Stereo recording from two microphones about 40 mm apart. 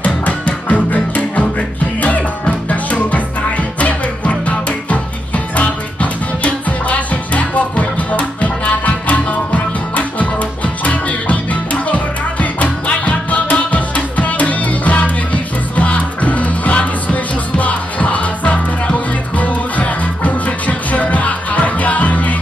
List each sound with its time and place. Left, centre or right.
0.0 s music: left